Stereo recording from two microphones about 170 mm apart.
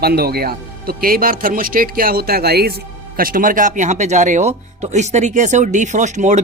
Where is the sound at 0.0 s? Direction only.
65° right (ahead or behind).